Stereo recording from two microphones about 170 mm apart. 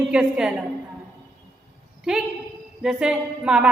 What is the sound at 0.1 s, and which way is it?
Speech, 5° right (ahead or behind).